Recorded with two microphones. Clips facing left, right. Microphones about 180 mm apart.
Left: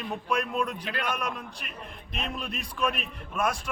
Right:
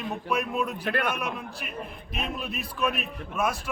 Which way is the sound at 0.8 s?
55° right (ahead or behind).